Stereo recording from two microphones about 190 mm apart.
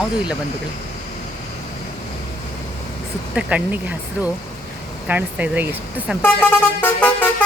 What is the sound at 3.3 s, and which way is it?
Speech, 5° right (ahead or behind).